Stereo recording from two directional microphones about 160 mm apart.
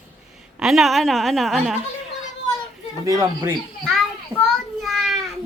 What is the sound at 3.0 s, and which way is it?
Speech, 20° right (ahead or behind).